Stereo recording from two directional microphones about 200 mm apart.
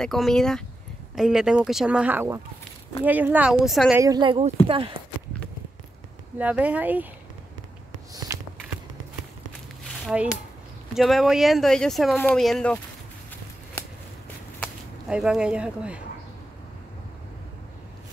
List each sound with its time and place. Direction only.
0.0 s speech: centre (ahead or behind)
4.0 s a woman's voice: 20° right (ahead or behind)
6.3 s speech: 5° right (ahead or behind)
8.3 s a sound: 15° right (ahead or behind)
11.0 s speech: centre (ahead or behind)
14.6 s whip: 5° right (ahead or behind)